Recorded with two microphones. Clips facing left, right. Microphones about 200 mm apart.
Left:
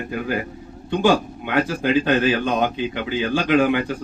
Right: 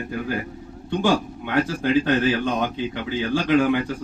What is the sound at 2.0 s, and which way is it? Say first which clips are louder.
A man's voice: left 2 dB; 70° left (ahead or behind).